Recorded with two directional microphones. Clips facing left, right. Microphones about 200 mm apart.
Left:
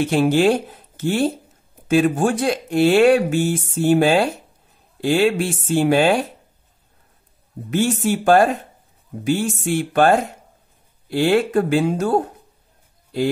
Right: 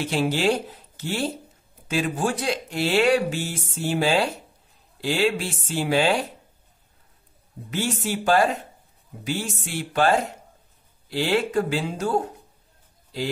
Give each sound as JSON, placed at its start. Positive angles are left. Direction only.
{"t": 0.0, "sound": "speech", "side_deg": 50}
{"t": 7.7, "sound": "speech", "side_deg": 50}